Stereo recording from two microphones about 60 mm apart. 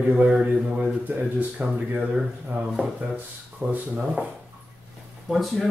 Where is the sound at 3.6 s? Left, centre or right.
Right.